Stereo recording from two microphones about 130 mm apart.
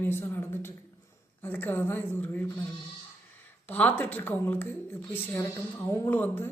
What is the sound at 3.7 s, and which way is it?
Speech, 10° left (ahead or behind).